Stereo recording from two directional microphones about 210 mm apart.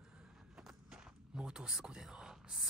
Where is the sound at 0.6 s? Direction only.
5° right (ahead or behind).